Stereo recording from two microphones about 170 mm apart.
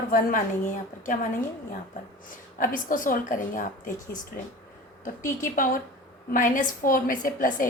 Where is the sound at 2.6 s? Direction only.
55° left (ahead or behind).